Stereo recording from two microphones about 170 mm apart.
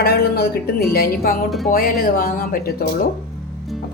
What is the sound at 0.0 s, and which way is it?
A woman's voice, 70° left (ahead or behind).